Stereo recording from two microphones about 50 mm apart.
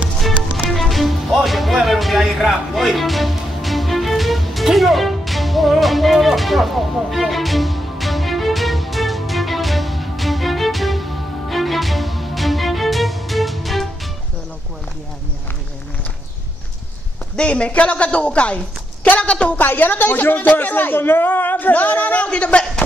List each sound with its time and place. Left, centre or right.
0.7 s music: centre
17.4 s speech: left
19.6 s a man's voice: left